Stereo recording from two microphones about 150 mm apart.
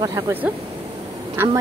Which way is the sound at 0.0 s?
30° right (ahead or behind).